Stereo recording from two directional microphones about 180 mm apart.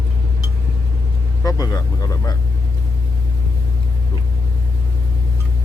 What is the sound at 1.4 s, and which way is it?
Vehicle, 20° left (ahead or behind).